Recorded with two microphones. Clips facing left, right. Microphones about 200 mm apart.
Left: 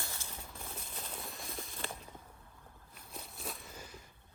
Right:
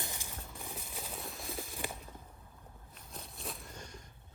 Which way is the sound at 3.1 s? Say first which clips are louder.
Even; centre (ahead or behind).